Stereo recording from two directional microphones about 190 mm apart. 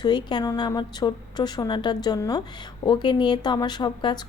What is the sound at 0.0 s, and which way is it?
A woman's voice, 25° left (ahead or behind).